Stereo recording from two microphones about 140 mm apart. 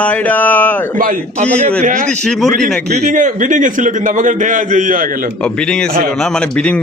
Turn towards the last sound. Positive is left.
turn(degrees=10)  # may be behind; listen again after turning